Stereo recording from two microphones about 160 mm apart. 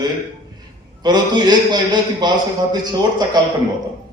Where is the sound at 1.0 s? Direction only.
25° right (ahead or behind).